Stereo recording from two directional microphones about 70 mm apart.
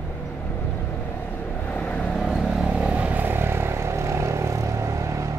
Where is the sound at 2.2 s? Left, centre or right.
Centre.